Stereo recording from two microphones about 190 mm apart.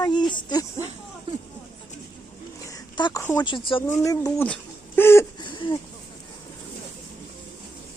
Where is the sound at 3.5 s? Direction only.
25° left (ahead or behind).